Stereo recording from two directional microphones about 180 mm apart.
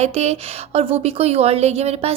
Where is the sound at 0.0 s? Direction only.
35° right (ahead or behind).